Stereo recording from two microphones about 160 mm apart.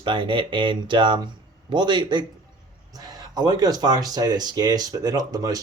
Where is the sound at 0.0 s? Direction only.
30° right (ahead or behind).